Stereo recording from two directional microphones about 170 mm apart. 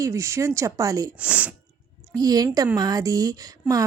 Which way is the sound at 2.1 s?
20° right (ahead or behind).